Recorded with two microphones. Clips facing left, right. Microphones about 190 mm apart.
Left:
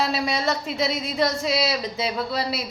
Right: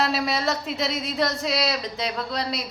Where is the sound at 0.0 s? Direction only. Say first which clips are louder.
Even; centre (ahead or behind).